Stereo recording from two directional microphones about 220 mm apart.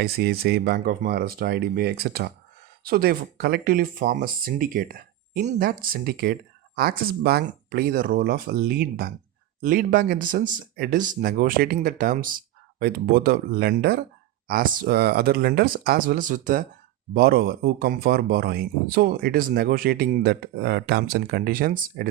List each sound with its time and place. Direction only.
0.0 s speech: 45° right (ahead or behind)